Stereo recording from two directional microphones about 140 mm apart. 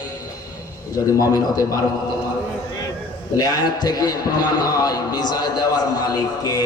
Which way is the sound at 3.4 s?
30° left (ahead or behind).